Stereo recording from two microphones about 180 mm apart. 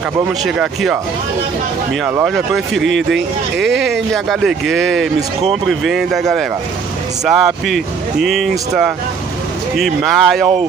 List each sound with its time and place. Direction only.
0.4 s speech: centre (ahead or behind)
2.2 s speech: centre (ahead or behind)
3.0 s speech: 80° right
4.1 s speech: centre (ahead or behind)